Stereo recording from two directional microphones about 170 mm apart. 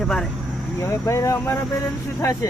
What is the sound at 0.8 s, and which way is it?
Speech, 15° left (ahead or behind).